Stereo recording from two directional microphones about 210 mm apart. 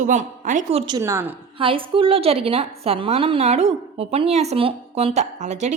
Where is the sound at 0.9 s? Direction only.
15° right (ahead or behind).